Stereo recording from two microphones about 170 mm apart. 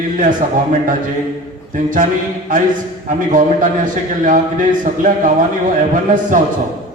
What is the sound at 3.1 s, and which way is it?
A man's voice, 50° right (ahead or behind).